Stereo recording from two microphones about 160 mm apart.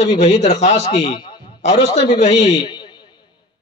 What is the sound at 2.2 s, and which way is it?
Speech, 45° left (ahead or behind).